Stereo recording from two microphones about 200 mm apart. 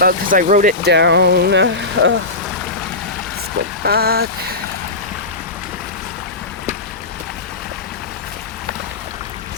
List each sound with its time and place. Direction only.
0.0 s speech: 45° right (ahead or behind); by 2.1 s 65° right (ahead or behind)
3.8 s speech: 50° right (ahead or behind)